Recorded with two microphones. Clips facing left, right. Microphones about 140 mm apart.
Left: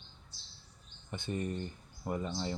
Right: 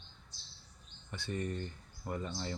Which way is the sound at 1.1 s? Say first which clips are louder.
Left 2 dB; 20° left (ahead or behind).